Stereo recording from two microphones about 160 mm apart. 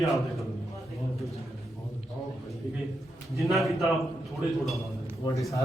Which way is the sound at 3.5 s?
Centre (ahead or behind).